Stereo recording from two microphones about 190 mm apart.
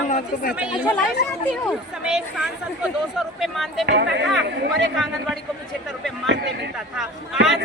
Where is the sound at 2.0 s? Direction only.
5° right (ahead or behind).